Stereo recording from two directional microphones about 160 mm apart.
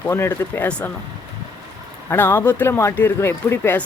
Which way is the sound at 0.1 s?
15° left (ahead or behind).